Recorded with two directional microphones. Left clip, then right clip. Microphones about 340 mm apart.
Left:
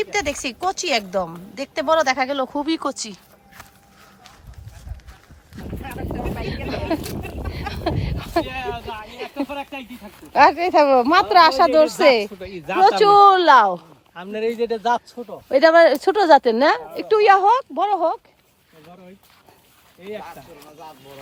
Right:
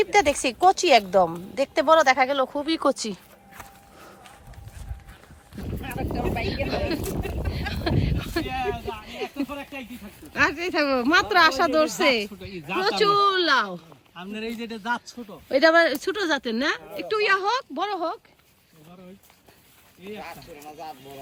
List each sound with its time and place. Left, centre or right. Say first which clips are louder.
0.0 s speech: right 3 dB; centre
5.8 s a sound: even; centre
7.4 s speech: left 5 dB; centre
14.3 s speech: left 12 dB; centre
15.4 s speech: left 6 dB; centre